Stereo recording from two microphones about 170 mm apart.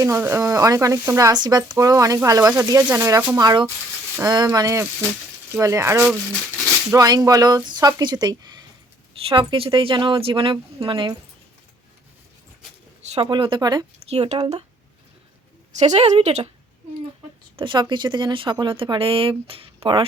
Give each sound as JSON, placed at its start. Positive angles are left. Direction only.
{"t": 0.0, "sound": "speech", "side_deg": -15}
{"t": 13.0, "sound": "speech", "side_deg": -35}
{"t": 14.0, "sound": "speech", "side_deg": -40}
{"t": 15.8, "sound": "speech", "side_deg": -40}
{"t": 17.6, "sound": "speech", "side_deg": -25}